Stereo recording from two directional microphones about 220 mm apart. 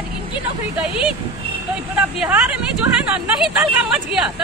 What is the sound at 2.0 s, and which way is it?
Speech, 5° right (ahead or behind).